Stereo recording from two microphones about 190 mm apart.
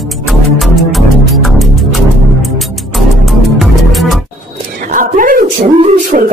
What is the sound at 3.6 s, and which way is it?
Music, centre (ahead or behind).